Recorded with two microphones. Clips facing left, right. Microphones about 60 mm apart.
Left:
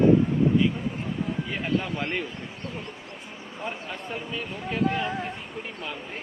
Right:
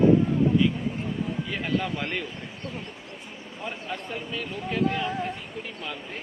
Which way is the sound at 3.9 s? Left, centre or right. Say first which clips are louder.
Even; centre.